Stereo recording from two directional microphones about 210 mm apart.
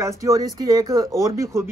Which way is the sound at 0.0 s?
15° right (ahead or behind).